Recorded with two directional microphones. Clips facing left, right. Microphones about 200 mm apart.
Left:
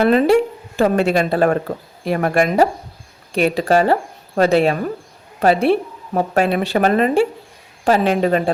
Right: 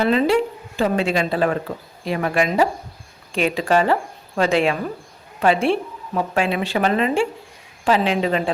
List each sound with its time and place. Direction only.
0.0 s a woman's voice: 55° left (ahead or behind)